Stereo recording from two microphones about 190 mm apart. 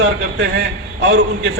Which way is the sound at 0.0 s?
60° right (ahead or behind).